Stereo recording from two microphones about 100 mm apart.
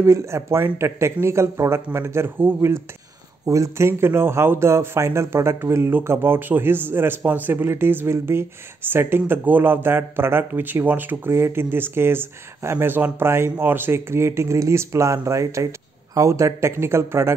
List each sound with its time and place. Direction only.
0.0 s speech: 30° right (ahead or behind)